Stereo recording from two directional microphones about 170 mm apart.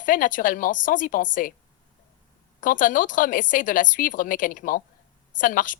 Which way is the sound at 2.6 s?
50° left (ahead or behind).